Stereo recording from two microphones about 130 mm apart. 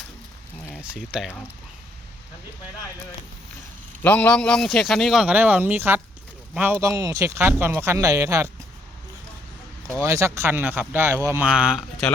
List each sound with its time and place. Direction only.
0.8 s speech: 5° right (ahead or behind)
4.0 s speech: 10° left (ahead or behind); by 6.8 s 10° right (ahead or behind)
6.8 s speech: 25° right (ahead or behind)
10.0 s speech: 20° right (ahead or behind)
11.4 s speech: 5° right (ahead or behind)